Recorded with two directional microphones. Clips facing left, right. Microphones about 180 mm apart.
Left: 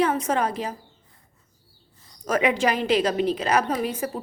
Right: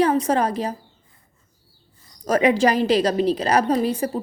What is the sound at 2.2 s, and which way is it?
A woman's voice, 35° right (ahead or behind).